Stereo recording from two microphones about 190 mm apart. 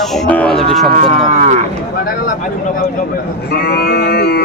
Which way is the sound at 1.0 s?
40° right (ahead or behind).